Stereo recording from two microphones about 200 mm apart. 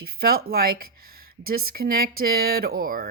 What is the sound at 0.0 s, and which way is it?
Speech, 50° right (ahead or behind).